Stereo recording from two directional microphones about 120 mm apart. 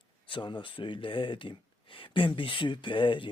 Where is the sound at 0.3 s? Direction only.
40° left (ahead or behind).